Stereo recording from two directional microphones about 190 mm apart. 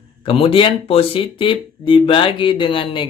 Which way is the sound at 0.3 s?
30° left (ahead or behind).